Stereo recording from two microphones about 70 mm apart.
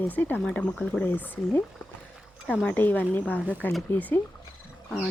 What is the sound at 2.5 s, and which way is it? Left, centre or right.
Speech, centre.